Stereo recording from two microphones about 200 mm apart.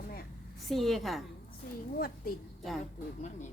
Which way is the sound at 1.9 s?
50° left (ahead or behind).